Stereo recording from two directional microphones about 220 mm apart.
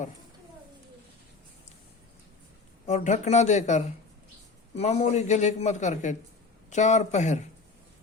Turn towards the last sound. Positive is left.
turn(degrees=30)  # may be behind; listen again after turning